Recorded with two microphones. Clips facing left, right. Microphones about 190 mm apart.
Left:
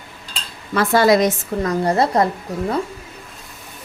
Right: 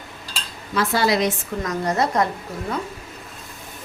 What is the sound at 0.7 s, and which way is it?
Speech, 55° left (ahead or behind).